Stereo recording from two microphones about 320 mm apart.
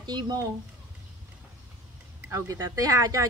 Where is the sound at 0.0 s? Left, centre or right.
Centre.